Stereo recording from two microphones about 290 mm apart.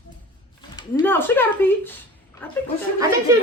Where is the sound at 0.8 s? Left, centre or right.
Centre.